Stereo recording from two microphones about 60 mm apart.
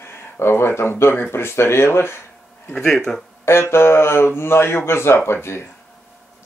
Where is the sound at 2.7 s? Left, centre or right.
Centre.